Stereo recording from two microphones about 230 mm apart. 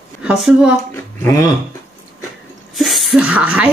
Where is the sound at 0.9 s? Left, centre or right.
Centre.